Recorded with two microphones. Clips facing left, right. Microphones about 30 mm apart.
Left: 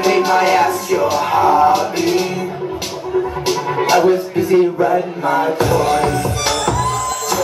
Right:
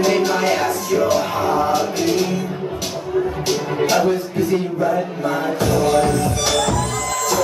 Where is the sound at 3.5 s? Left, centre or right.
Centre.